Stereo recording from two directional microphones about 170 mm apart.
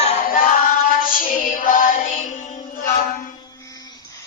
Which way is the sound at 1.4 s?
50° left (ahead or behind).